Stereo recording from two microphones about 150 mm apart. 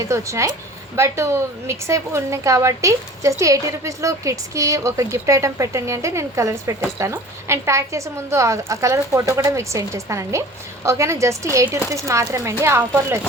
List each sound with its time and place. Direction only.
0.0 s a woman's voice: 20° right (ahead or behind)